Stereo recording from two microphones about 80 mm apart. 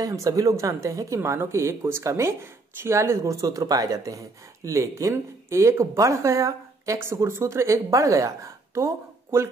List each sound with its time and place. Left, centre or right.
0.0 s speech: right